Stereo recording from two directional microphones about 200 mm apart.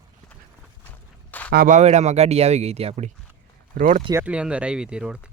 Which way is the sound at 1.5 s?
45° right (ahead or behind).